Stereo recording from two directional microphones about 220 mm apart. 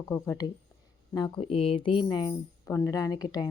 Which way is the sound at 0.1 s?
15° left (ahead or behind).